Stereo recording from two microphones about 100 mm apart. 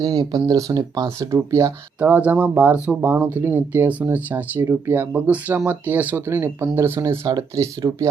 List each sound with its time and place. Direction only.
0.2 s speech: 45° right (ahead or behind)
2.0 s speech: 15° right (ahead or behind); by 8.1 s 35° right (ahead or behind)